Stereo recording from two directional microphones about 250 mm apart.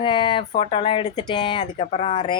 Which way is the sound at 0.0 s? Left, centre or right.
Centre.